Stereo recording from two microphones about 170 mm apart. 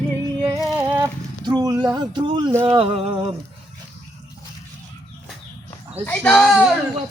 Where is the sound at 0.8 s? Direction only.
15° right (ahead or behind).